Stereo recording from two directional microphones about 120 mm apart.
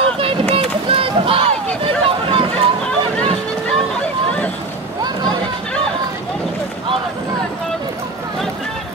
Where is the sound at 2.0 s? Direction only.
45° right (ahead or behind).